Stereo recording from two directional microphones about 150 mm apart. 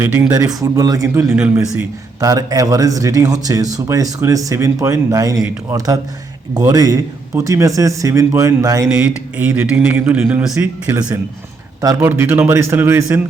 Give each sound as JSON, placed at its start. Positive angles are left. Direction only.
{"t": 0.0, "sound": "a man's voice", "side_deg": -15}
{"t": 1.3, "sound": "speech", "side_deg": -5}
{"t": 2.2, "sound": "a man's voice", "side_deg": -25}
{"t": 8.9, "sound": "speech", "side_deg": -10}